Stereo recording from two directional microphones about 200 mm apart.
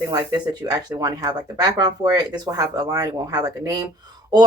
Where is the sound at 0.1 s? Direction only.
20° right (ahead or behind).